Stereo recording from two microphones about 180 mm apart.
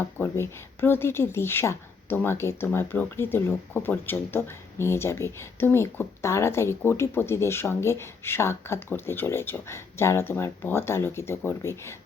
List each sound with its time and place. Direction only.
0.0 s speech: 15° left (ahead or behind)